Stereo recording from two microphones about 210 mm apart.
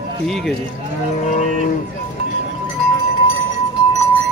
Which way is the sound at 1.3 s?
35° left (ahead or behind).